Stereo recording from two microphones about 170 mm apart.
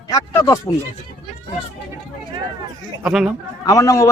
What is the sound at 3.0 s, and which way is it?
Speech, 5° right (ahead or behind).